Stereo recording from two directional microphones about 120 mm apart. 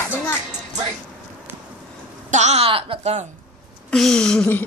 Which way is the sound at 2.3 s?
70° right (ahead or behind).